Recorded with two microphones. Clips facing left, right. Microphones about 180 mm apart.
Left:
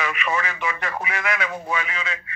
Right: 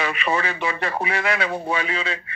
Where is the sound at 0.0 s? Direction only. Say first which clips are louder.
Right 2 dB; 30° right (ahead or behind).